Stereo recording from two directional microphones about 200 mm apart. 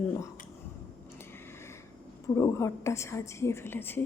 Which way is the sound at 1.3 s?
10° left (ahead or behind).